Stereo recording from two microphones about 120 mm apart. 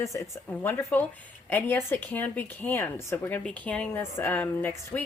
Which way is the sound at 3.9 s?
20° left (ahead or behind).